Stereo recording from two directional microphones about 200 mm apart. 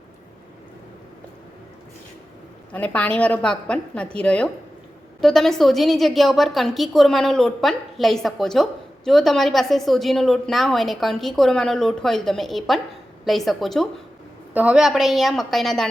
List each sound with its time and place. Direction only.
2.7 s a woman's voice: 5° left (ahead or behind)